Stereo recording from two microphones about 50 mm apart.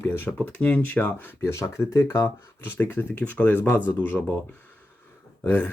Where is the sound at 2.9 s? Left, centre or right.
Left.